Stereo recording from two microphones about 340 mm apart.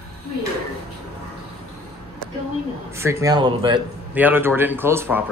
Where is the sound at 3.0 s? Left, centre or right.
Centre.